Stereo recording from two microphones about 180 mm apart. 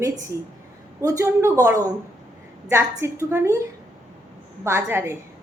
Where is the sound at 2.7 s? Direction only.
15° right (ahead or behind).